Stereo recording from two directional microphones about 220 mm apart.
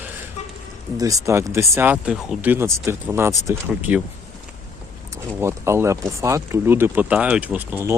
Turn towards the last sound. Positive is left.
turn(degrees=-10)  # may be behind; listen again after turning